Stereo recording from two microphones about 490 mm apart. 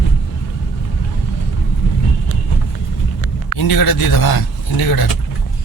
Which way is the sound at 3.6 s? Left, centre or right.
Left.